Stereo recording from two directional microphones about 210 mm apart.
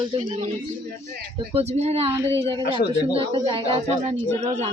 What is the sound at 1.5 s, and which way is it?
Speech, 30° right (ahead or behind).